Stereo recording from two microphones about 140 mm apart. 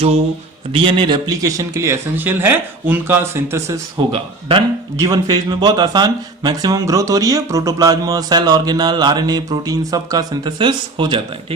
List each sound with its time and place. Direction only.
0.7 s speech: 40° right (ahead or behind); by 3.8 s 20° right (ahead or behind)
4.1 s a man's voice: 40° right (ahead or behind)
5.0 s speech: 30° right (ahead or behind)